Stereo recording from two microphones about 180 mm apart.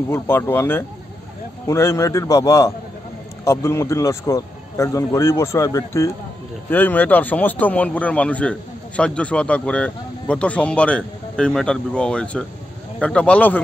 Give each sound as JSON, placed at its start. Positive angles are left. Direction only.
{"t": 0.1, "sound": "a man's voice", "side_deg": 10}